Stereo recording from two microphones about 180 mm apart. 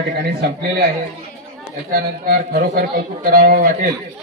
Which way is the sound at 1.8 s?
55° right (ahead or behind).